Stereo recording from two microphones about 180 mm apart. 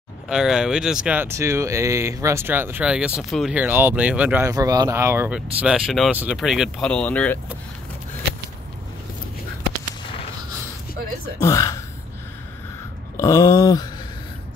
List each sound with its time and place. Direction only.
0.3 s speech: 5° right (ahead or behind)
11.4 s speech: 20° left (ahead or behind)
13.2 s speech: 20° left (ahead or behind)